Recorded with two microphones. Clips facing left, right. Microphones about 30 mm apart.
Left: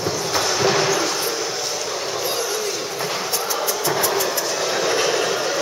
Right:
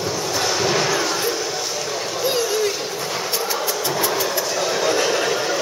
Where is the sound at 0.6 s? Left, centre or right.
Centre.